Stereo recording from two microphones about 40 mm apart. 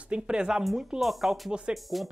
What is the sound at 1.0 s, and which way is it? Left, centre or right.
Speech, centre.